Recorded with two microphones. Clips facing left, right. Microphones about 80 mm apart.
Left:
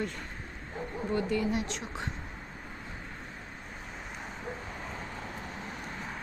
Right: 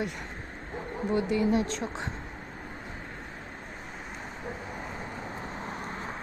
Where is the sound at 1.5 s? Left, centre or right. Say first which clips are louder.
Right 6 dB; right.